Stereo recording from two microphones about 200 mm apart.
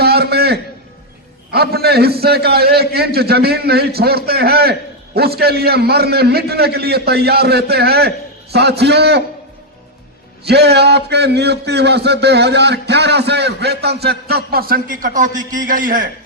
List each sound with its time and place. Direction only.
0.0 s a sound: 55° right (ahead or behind)
1.5 s a man's voice: 55° right (ahead or behind)
10.4 s a man's voice: 55° right (ahead or behind)